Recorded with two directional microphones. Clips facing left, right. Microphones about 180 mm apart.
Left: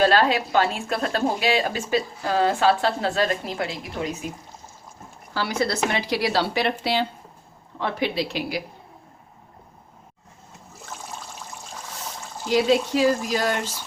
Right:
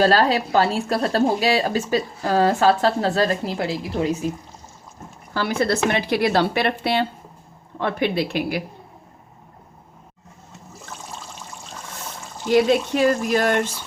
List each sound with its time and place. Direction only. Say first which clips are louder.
0.0 s a woman's voice: right 2 dB; 40° right (ahead or behind)
5.3 s a woman's voice: right 3 dB; 55° right (ahead or behind)
12.5 s a woman's voice: right 3 dB; 55° right (ahead or behind)